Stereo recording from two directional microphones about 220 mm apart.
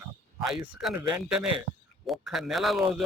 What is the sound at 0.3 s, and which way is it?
Speech, centre (ahead or behind).